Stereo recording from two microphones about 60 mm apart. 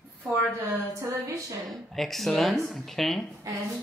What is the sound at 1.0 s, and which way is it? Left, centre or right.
Speech, right.